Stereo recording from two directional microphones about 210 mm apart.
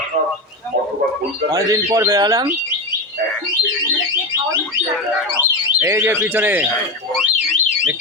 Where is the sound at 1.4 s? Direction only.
15° right (ahead or behind).